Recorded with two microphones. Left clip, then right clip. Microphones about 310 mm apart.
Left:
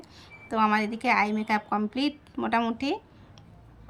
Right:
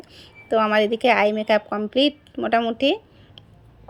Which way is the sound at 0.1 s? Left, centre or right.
Centre.